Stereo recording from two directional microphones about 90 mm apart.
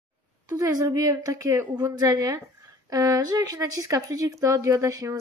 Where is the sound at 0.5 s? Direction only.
45° right (ahead or behind).